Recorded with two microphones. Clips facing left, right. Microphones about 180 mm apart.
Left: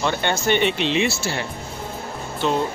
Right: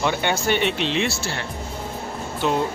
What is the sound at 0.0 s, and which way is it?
Speech, 10° right (ahead or behind).